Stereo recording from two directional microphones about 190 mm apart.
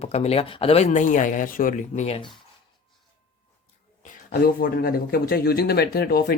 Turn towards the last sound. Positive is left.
turn(degrees=55)  # may be behind; listen again after turning